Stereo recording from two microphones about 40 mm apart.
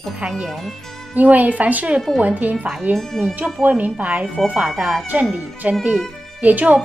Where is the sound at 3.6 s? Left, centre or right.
Right.